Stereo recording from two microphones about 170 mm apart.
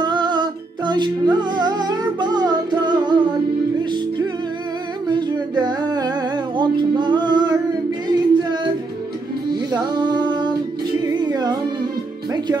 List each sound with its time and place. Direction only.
0.0 s music: 25° right (ahead or behind)
5.0 s humming: 25° right (ahead or behind)
8.1 s singing: 25° right (ahead or behind)
9.5 s music: 25° right (ahead or behind)